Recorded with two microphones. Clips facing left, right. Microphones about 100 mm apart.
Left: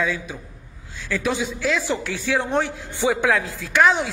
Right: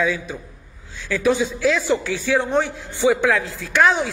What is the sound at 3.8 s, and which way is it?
Speech, centre (ahead or behind).